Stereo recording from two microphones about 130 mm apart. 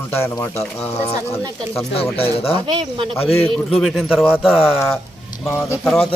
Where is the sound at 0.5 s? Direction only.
5° left (ahead or behind).